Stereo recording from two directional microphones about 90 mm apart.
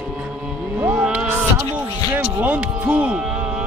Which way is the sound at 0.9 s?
10° right (ahead or behind).